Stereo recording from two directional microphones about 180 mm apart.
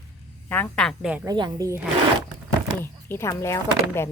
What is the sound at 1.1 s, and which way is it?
Speech, 20° right (ahead or behind).